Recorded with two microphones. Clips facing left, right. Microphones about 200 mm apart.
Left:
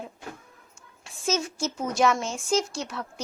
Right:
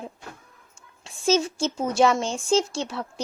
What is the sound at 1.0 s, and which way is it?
A child's voice, 30° right (ahead or behind).